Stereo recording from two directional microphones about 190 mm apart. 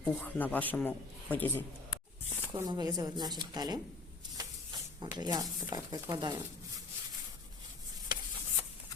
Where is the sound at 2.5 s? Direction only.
20° right (ahead or behind).